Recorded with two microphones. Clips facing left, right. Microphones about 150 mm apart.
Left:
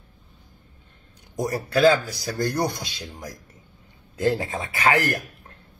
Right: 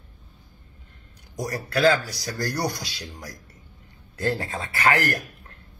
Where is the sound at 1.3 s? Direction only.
25° left (ahead or behind).